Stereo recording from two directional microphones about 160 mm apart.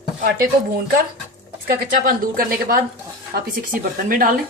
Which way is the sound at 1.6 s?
65° right (ahead or behind).